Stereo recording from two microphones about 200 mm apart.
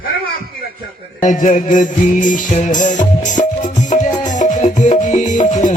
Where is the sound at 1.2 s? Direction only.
40° left (ahead or behind).